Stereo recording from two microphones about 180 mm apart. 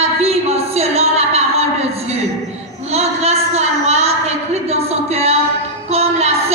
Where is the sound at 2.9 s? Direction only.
35° right (ahead or behind).